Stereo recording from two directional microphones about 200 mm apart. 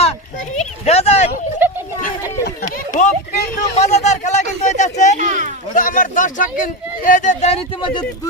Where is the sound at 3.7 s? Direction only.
35° left (ahead or behind).